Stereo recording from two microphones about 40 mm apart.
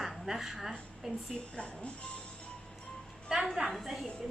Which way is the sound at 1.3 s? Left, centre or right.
Left.